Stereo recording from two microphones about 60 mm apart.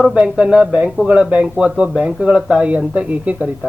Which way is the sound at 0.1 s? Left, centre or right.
Centre.